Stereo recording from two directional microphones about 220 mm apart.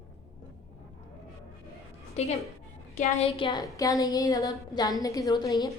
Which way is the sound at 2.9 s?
30° left (ahead or behind).